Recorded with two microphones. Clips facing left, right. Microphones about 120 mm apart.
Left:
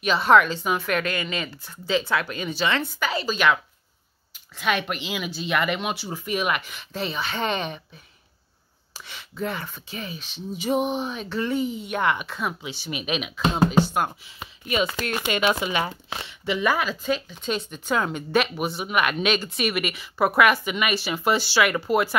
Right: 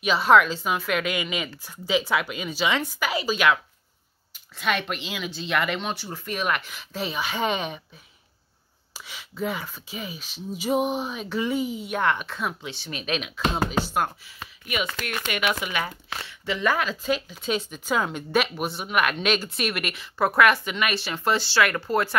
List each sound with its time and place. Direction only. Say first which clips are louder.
0.0 s speech: even; 5° right (ahead or behind)
14.2 s speech: left 2 dB; 25° left (ahead or behind); by 22.1 s 10° left (ahead or behind)